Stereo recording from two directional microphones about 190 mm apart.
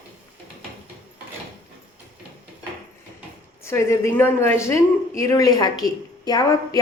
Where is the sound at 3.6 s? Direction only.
15° left (ahead or behind).